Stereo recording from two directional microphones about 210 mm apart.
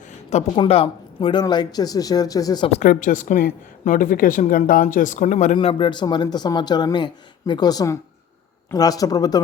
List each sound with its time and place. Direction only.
0.0 s speech: 30° left (ahead or behind)
5.5 s speech: 25° left (ahead or behind)